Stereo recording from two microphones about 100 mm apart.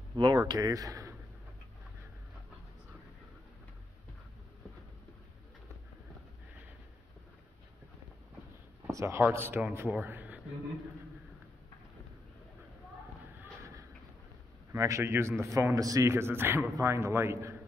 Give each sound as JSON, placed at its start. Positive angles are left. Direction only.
{"t": 0.1, "sound": "speech", "side_deg": -45}
{"t": 8.9, "sound": "a man's voice", "side_deg": -25}
{"t": 13.4, "sound": "a sound", "side_deg": -30}
{"t": 14.7, "sound": "a man's voice", "side_deg": -30}